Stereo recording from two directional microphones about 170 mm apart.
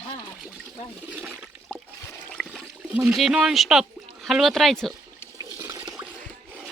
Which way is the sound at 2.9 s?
5° right (ahead or behind).